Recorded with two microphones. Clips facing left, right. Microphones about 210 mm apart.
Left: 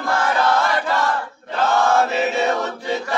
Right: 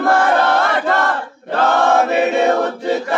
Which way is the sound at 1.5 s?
60° right (ahead or behind).